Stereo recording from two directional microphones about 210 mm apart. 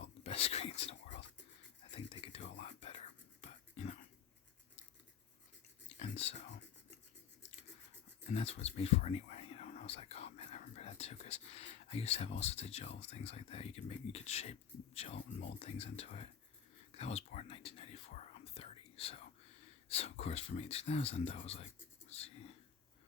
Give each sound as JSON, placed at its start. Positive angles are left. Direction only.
{"t": 0.0, "sound": "whispering", "side_deg": 30}
{"t": 6.0, "sound": "a sound", "side_deg": 30}
{"t": 8.3, "sound": "speech", "side_deg": 30}